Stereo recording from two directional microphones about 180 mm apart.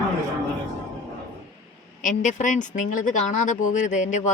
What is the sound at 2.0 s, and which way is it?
Speech, 45° left (ahead or behind).